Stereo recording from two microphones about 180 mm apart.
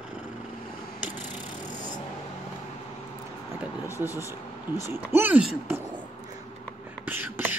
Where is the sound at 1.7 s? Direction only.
45° left (ahead or behind).